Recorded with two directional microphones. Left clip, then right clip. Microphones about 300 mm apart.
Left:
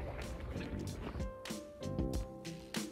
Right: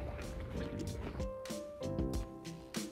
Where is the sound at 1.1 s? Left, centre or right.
Centre.